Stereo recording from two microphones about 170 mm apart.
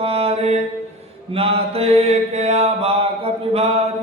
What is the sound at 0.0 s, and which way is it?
Mantra, 35° right (ahead or behind).